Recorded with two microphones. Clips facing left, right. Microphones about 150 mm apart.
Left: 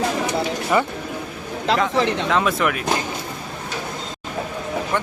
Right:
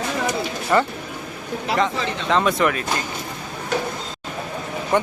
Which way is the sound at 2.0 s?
70° left (ahead or behind).